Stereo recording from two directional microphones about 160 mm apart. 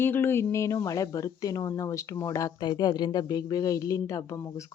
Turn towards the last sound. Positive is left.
turn(degrees=20)  # may be behind; listen again after turning